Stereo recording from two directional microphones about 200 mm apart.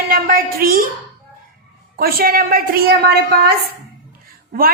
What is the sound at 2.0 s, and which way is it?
A woman's voice, 50° right (ahead or behind).